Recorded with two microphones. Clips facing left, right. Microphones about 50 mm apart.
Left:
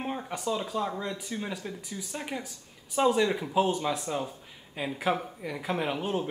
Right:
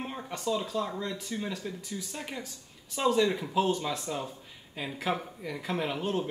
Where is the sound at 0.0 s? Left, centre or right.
Centre.